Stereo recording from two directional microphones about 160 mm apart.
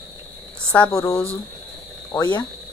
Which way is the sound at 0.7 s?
15° left (ahead or behind).